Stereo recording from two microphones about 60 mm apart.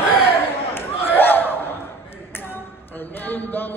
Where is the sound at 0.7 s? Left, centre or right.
Left.